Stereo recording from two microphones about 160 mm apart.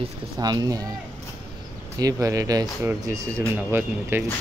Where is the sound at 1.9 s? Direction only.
20° right (ahead or behind).